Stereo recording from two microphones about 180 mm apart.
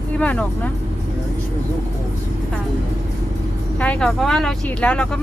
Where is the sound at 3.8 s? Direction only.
5° left (ahead or behind).